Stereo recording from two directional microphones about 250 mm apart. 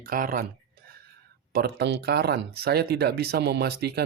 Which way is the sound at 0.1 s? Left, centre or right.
Right.